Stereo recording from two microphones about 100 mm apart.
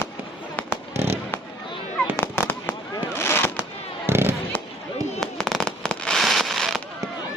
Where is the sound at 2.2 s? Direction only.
20° left (ahead or behind).